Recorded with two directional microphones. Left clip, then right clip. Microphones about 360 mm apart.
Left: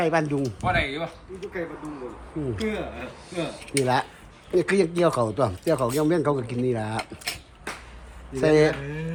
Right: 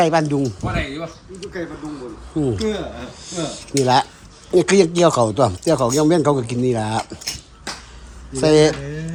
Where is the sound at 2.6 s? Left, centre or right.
Centre.